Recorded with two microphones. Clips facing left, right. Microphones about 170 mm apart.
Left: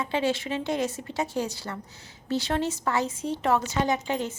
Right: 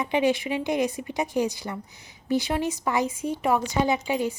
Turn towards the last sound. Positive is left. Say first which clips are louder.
# right 2 dB
turn(degrees=-10)  # may be behind; listen again after turning